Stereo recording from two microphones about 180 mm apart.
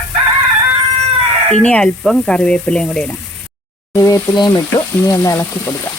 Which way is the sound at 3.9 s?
20° left (ahead or behind).